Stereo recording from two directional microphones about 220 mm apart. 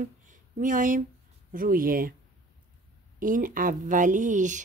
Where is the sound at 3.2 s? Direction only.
40° right (ahead or behind).